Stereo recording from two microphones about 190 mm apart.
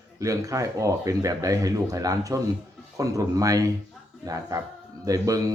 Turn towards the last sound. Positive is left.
turn(degrees=-20)  # may be behind; listen again after turning